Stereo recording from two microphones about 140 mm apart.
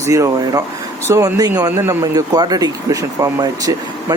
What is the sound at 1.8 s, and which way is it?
Speech, 15° right (ahead or behind).